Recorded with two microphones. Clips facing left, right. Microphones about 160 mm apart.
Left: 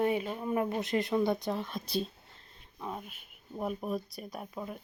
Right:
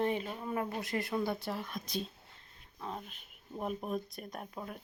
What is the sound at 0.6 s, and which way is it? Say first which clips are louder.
Speech: left 6 dB; 20° left (ahead or behind).